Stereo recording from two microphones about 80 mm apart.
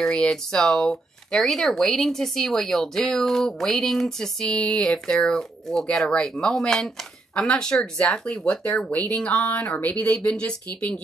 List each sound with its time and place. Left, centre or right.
0.0 s speech: centre